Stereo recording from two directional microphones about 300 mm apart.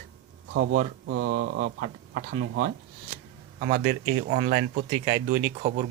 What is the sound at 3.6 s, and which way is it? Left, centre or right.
Speech, right.